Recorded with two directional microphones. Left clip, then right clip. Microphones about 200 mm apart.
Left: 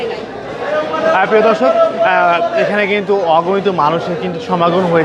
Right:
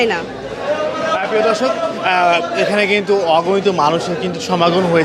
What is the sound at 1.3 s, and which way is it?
Speech, 10° left (ahead or behind).